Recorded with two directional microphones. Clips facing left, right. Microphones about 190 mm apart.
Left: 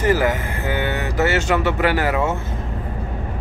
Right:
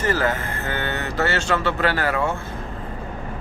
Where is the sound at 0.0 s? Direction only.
15° left (ahead or behind).